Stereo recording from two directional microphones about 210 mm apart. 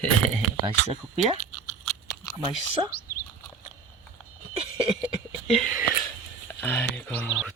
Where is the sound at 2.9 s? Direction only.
45° left (ahead or behind).